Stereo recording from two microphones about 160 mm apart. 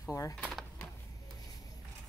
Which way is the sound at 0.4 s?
Centre (ahead or behind).